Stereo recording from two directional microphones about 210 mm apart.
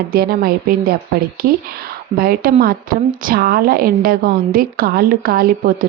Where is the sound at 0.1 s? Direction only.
45° right (ahead or behind).